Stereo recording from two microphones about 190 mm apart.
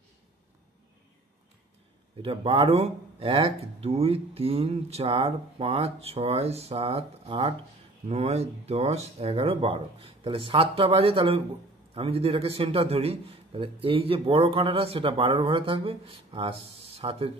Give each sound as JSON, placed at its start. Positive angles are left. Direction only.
{"t": 2.2, "sound": "a man's voice", "side_deg": -30}